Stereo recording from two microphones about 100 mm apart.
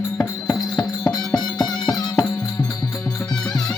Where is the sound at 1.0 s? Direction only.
35° left (ahead or behind).